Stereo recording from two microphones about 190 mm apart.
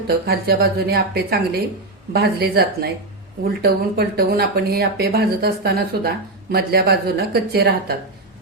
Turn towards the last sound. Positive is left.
turn(degrees=-55)  # may be behind; listen again after turning